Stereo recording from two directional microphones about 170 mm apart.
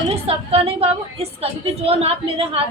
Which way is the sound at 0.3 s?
35° right (ahead or behind).